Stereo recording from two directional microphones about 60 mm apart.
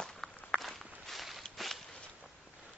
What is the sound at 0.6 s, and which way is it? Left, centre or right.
Walk, centre.